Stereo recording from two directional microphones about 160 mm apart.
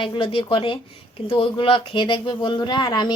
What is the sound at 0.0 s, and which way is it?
Speech, 30° left (ahead or behind).